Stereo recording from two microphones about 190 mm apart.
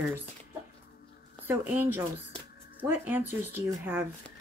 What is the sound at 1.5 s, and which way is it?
Speech, 10° right (ahead or behind).